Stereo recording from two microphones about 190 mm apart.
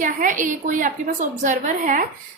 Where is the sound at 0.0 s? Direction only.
45° right (ahead or behind).